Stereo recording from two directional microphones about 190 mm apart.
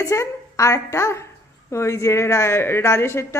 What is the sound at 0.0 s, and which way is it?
A woman's voice, 15° left (ahead or behind).